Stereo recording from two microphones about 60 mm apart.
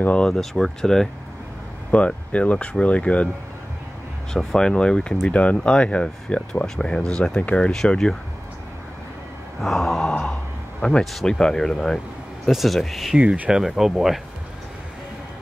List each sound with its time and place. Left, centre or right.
0.0 s speech: left
0.3 s speech: centre
1.9 s speech: left
4.3 s speech: centre
7.7 s speech: centre
9.6 s speech: centre
13.2 s speech: right
13.5 s speech: centre